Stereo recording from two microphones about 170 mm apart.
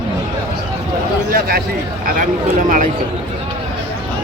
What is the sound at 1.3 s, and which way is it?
Speech, 65° right (ahead or behind).